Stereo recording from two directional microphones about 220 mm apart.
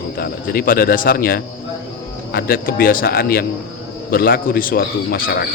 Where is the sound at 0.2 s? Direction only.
40° left (ahead or behind).